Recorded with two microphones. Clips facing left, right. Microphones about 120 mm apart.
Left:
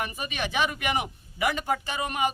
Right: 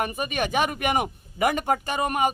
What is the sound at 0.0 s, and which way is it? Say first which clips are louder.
Speech: right 5 dB; 50° right (ahead or behind).